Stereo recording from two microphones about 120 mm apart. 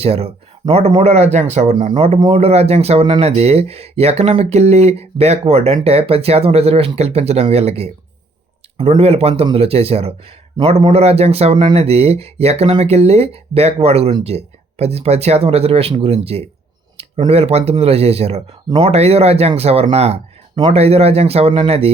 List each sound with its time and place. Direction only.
0.0 s speech: 55° right (ahead or behind)
1.9 s speech: 45° right (ahead or behind)
9.0 s speech: 55° right (ahead or behind)